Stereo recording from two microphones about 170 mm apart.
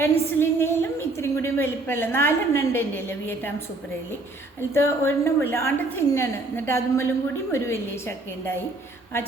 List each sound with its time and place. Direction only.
0.0 s a woman's voice: 15° left (ahead or behind)
4.7 s a woman's voice: 15° left (ahead or behind)